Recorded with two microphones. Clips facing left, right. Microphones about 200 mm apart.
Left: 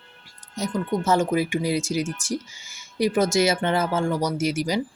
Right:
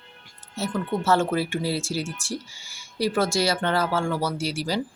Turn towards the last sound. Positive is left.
turn(degrees=20)  # may be behind; listen again after turning